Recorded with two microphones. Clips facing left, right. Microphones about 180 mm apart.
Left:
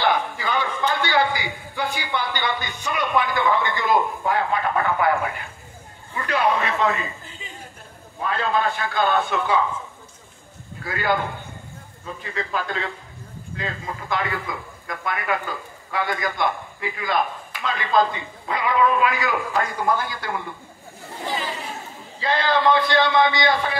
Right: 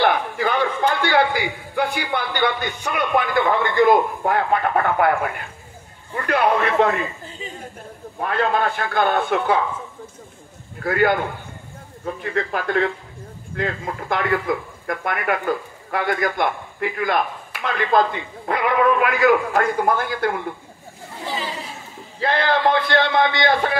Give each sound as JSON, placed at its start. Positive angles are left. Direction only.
{"t": 0.0, "sound": "a man's voice", "side_deg": -60}
{"t": 8.2, "sound": "speech", "side_deg": -55}
{"t": 10.8, "sound": "a man's voice", "side_deg": -55}
{"t": 22.2, "sound": "speech", "side_deg": -55}